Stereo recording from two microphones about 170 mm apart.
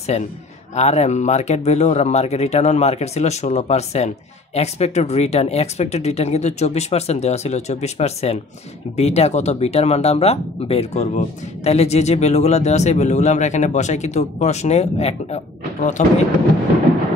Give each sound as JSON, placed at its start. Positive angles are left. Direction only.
{"t": 0.1, "sound": "speech", "side_deg": 40}